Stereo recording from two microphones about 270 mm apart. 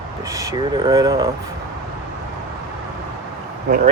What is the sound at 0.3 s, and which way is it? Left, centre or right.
Speech, centre.